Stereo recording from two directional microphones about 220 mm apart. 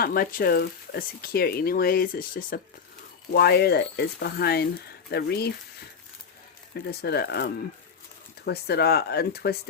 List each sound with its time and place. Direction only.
0.0 s speech: 40° left (ahead or behind)
6.7 s speech: 50° left (ahead or behind)